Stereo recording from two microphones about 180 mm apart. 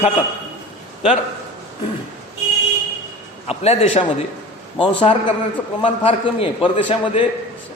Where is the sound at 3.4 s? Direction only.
35° left (ahead or behind).